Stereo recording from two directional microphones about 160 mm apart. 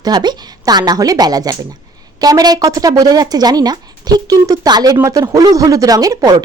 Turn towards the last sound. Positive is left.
turn(degrees=-25)  # may be behind; listen again after turning